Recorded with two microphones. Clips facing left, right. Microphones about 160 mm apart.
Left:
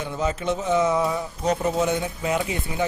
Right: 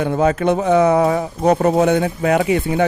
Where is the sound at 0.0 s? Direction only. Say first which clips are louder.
Right 10 dB; 60° right (ahead or behind).